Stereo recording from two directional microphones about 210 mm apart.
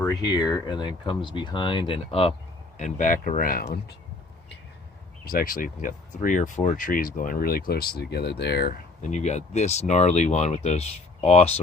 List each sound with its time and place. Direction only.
0.3 s speech: 20° left (ahead or behind)
2.7 s speech: 35° left (ahead or behind)
5.2 s speech: 45° left (ahead or behind)
9.0 s speech: 35° left (ahead or behind)